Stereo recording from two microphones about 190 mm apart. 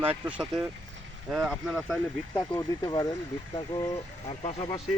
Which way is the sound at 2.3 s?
15° left (ahead or behind).